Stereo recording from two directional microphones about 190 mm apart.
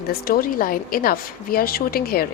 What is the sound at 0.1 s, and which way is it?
Speech, 50° left (ahead or behind).